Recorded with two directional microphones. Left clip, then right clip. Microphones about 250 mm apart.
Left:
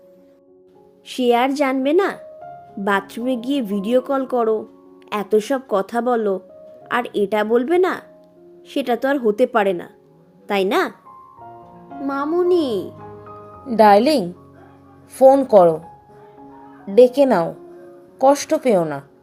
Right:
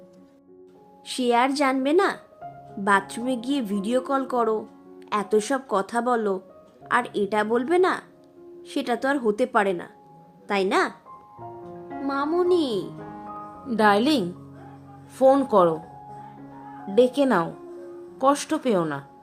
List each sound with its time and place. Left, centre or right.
1.0 s a woman's voice: centre
12.0 s a woman's voice: centre
16.9 s speech: right
18.3 s speech: right